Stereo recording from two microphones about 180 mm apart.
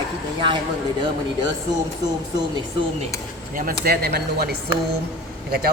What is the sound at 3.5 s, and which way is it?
A man's voice, 50° right (ahead or behind).